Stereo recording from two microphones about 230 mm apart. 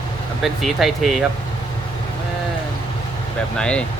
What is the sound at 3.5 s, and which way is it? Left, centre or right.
Speech, centre.